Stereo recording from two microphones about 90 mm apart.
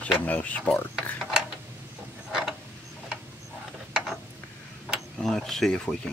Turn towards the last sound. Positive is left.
turn(degrees=5)  # may be behind; listen again after turning